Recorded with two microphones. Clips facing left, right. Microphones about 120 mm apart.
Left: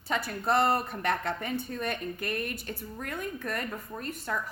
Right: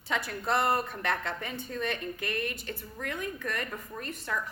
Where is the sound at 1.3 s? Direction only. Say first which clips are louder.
Left 4 dB; 50° left (ahead or behind).